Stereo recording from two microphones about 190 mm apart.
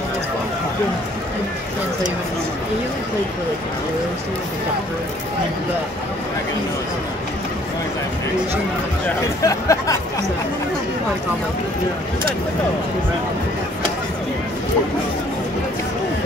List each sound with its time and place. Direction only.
9.4 s speech: 15° left (ahead or behind)